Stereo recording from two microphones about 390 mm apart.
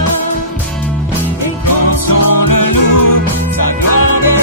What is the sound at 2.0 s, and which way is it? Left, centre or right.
Music, left.